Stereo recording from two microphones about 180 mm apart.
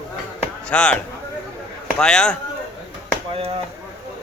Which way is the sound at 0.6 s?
5° left (ahead or behind).